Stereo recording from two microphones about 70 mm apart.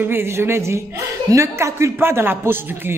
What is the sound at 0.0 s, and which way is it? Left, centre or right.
A man's voice, right.